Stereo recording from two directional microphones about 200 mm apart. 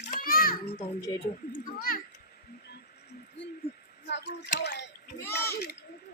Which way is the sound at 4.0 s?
60° left (ahead or behind).